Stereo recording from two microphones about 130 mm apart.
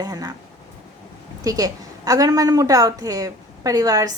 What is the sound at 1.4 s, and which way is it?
A woman's voice, 30° right (ahead or behind).